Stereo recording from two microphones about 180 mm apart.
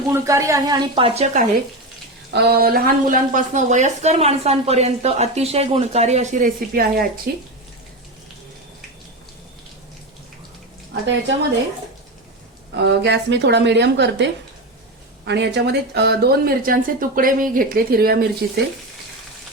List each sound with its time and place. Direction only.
0.1 s speech: 15° right (ahead or behind); by 1.5 s 40° right (ahead or behind)
2.3 s a woman's voice: 60° right (ahead or behind)
12.7 s speech: 70° right (ahead or behind)